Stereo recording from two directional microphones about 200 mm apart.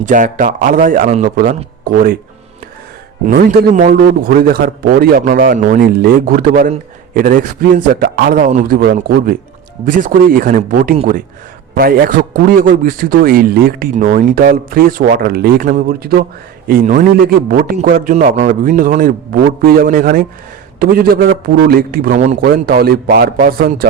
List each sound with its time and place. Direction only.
0.0 s a man's voice: 40° right (ahead or behind)
3.2 s a man's voice: 40° right (ahead or behind)
22.4 s a man's voice: 50° right (ahead or behind)